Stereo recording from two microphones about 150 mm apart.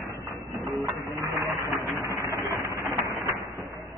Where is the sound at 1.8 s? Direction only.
20° right (ahead or behind).